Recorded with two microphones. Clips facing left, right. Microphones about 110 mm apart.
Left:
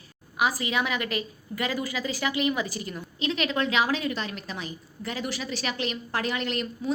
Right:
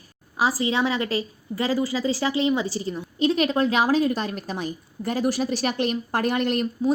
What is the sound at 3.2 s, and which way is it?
A woman's voice, 40° right (ahead or behind).